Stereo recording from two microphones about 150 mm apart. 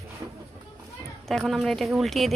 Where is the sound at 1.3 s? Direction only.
Centre (ahead or behind).